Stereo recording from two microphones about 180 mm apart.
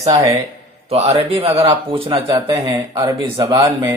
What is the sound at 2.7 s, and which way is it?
Speech, 15° right (ahead or behind).